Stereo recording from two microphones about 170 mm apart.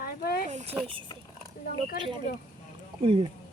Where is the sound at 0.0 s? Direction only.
60° left (ahead or behind).